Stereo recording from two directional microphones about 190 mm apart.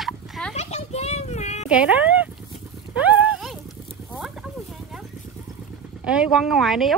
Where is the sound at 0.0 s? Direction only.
Centre (ahead or behind).